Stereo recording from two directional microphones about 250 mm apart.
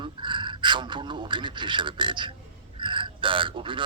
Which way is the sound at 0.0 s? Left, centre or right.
Centre.